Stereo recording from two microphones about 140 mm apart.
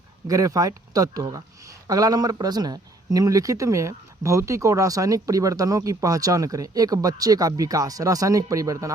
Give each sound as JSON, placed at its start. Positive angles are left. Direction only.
{"t": 0.3, "sound": "speech", "side_deg": -25}